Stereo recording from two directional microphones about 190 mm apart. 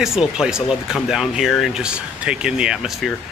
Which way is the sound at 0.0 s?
5° right (ahead or behind).